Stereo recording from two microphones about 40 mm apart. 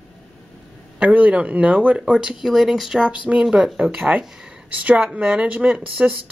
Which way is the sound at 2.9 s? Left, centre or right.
Right.